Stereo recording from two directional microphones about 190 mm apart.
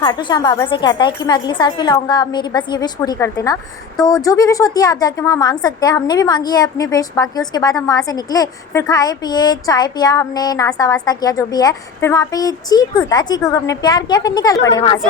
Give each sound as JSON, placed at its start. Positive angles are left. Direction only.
{"t": 0.0, "sound": "a woman's voice", "side_deg": 20}